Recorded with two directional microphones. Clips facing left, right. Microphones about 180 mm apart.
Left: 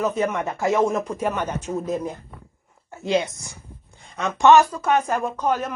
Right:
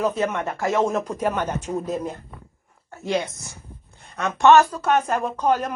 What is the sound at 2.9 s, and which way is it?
Speech, 20° left (ahead or behind).